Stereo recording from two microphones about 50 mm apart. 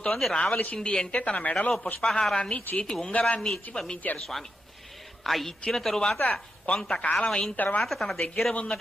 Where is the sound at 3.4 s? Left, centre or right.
Centre.